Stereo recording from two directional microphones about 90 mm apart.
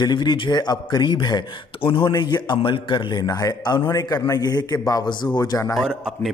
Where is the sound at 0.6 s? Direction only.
50° left (ahead or behind).